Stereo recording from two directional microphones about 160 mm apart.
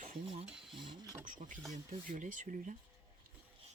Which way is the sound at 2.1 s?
55° right (ahead or behind).